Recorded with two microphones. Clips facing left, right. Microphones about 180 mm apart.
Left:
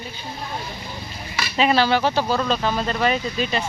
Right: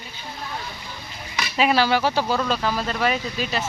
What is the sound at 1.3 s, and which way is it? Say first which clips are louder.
Speech: left 1 dB; 15° right (ahead or behind).